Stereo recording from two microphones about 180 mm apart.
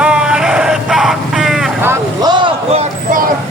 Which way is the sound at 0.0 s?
5° right (ahead or behind).